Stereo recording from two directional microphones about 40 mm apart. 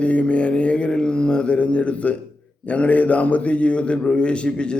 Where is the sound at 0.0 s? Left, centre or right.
Left.